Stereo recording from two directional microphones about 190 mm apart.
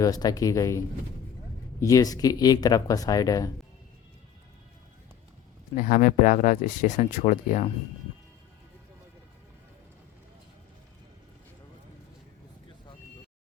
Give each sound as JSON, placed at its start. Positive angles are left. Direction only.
{"t": 0.0, "sound": "speech", "side_deg": 20}
{"t": 5.7, "sound": "speech", "side_deg": 45}